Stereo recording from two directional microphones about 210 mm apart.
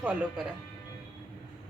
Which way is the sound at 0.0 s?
10° right (ahead or behind).